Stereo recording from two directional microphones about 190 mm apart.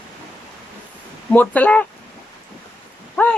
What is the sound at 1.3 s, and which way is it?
Speech, 10° left (ahead or behind).